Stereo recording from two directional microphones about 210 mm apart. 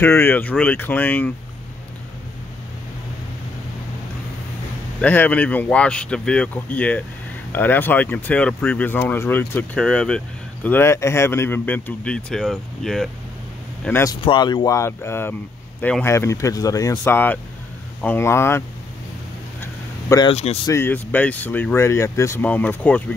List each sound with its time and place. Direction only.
0.0 s speech: 10° left (ahead or behind)
5.0 s speech: 10° left (ahead or behind)
13.8 s speech: 10° left (ahead or behind)
19.6 s a sound: 15° left (ahead or behind)
20.6 s speech: 10° left (ahead or behind)